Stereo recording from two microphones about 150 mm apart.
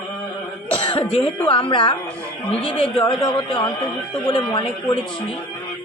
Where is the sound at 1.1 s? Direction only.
45° left (ahead or behind).